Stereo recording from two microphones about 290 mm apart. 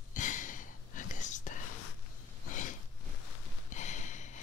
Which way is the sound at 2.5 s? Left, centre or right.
Left.